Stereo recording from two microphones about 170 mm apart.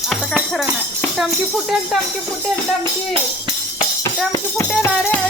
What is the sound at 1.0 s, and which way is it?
Speech, centre (ahead or behind).